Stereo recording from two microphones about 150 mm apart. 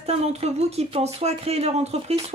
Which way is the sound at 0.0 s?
45° right (ahead or behind).